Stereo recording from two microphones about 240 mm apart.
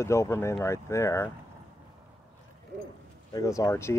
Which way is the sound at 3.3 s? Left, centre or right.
Centre.